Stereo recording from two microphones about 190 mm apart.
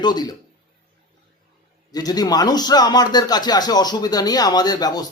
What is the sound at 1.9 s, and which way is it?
Speech, 20° left (ahead or behind).